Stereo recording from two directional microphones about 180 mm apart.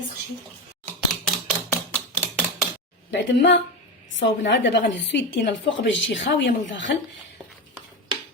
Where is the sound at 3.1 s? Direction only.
75° left (ahead or behind).